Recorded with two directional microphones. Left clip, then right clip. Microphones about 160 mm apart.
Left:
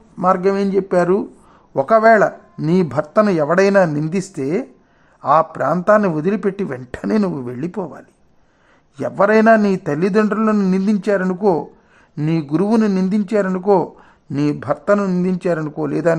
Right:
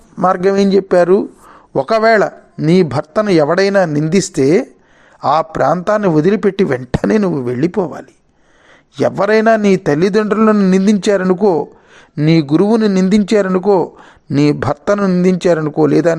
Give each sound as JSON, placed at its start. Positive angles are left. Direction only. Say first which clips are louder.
{"t": 0.2, "sound": "speech", "louder": "right 4 dB", "side_deg": -25}
{"t": 11.3, "sound": "speech", "louder": "right 4 dB", "side_deg": -25}
{"t": 14.3, "sound": "speech", "louder": "right 6 dB", "side_deg": -45}